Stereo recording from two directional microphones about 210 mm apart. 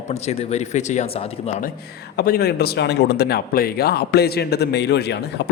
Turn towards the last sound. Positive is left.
turn(degrees=50)  # may be behind; listen again after turning